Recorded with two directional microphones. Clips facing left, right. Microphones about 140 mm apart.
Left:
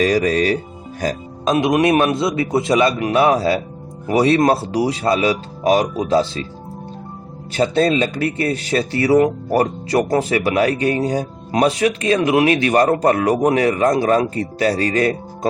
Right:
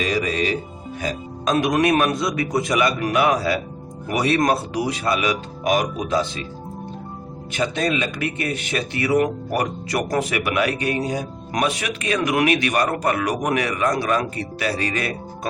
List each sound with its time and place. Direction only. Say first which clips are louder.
0.0 s speech: left 6 dB; 40° left (ahead or behind)
1.5 s speech: left 3 dB; 20° left (ahead or behind)
7.5 s speech: left 6 dB; 35° left (ahead or behind)